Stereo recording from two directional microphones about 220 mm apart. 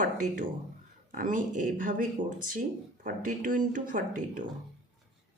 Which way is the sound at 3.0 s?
35° right (ahead or behind).